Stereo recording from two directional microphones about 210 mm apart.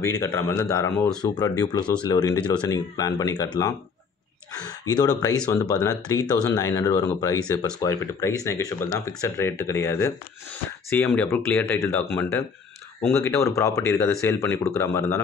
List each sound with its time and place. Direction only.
0.0 s speech: 15° left (ahead or behind)
4.5 s speech: 15° left (ahead or behind)